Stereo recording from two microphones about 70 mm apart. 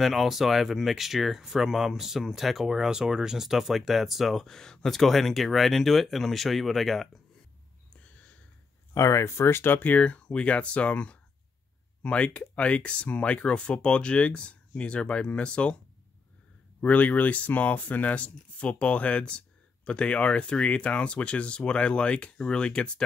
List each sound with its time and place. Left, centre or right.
0.0 s speech: centre
8.9 s speech: left
9.8 s speech: left
16.8 s speech: left